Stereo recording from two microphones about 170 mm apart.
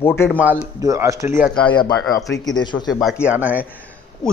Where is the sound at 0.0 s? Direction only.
15° left (ahead or behind).